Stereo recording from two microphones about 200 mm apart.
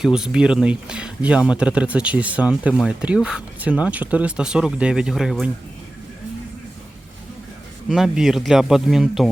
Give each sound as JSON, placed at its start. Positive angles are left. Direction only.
{"t": 0.0, "sound": "speech", "side_deg": -5}
{"t": 7.9, "sound": "speech", "side_deg": 0}